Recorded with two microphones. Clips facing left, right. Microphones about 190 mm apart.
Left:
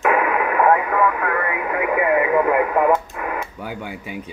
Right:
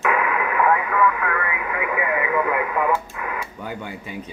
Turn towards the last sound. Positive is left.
turn(degrees=10)  # may be behind; listen again after turning